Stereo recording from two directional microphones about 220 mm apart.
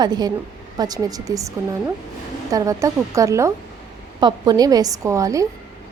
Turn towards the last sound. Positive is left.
turn(degrees=-15)  # may be behind; listen again after turning